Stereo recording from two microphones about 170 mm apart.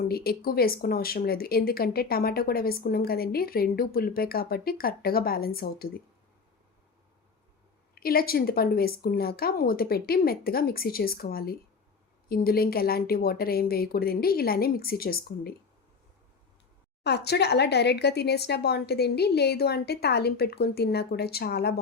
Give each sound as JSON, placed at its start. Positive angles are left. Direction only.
{"t": 0.1, "sound": "speech", "side_deg": 65}
{"t": 7.9, "sound": "speech", "side_deg": 60}
{"t": 17.0, "sound": "speech", "side_deg": 75}